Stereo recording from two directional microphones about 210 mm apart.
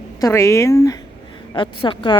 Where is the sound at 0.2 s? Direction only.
15° left (ahead or behind).